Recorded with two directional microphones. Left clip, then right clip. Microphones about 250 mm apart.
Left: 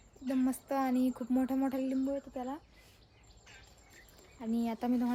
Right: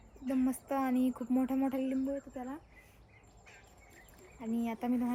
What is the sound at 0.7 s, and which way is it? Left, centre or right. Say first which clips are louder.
Speech: left 1 dB; centre.